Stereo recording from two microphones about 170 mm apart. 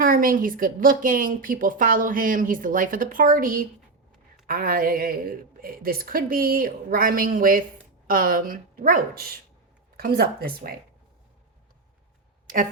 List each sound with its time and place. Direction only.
0.0 s a woman's voice: 55° right (ahead or behind)